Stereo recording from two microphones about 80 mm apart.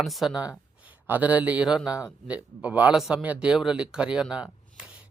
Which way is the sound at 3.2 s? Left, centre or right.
Centre.